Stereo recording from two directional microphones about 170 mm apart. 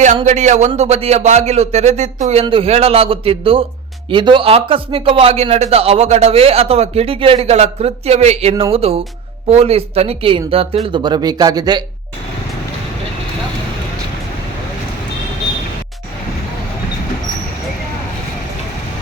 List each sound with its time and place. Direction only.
0.3 s speech: 45° right (ahead or behind); by 11.8 s 25° right (ahead or behind)